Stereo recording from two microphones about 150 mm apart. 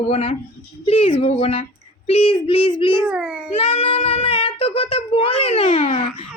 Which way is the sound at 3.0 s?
5° right (ahead or behind).